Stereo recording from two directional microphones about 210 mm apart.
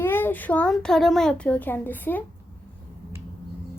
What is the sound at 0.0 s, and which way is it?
A child's voice, 10° left (ahead or behind).